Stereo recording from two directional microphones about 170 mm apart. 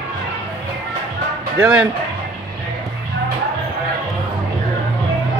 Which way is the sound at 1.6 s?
10° right (ahead or behind).